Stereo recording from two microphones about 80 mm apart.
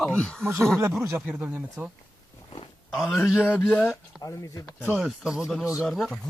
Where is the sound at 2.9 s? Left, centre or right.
Centre.